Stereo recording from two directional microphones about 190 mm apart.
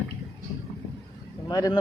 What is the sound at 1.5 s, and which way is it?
Speech, 20° left (ahead or behind).